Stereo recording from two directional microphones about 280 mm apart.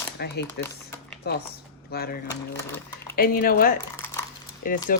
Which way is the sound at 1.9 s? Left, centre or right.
Left.